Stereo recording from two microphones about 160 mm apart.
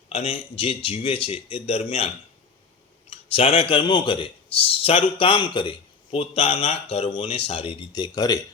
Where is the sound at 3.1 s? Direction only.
35° left (ahead or behind).